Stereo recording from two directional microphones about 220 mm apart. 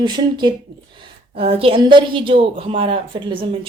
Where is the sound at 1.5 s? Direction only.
25° right (ahead or behind).